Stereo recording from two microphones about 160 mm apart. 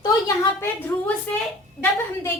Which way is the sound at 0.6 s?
10° left (ahead or behind).